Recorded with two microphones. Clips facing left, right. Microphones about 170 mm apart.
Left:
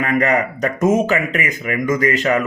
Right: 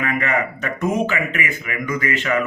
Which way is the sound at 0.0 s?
40° left (ahead or behind).